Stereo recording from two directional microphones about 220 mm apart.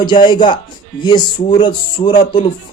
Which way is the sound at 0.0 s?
20° left (ahead or behind).